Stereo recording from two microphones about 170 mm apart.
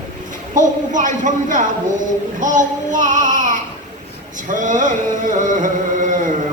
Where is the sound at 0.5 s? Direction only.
50° right (ahead or behind).